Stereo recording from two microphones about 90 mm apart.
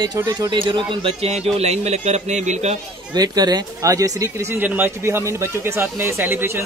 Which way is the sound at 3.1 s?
45° right (ahead or behind).